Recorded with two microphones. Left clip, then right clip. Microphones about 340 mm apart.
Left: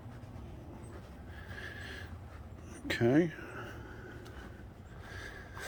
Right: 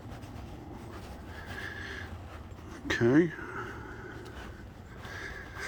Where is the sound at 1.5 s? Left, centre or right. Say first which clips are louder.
Right 5 dB; centre.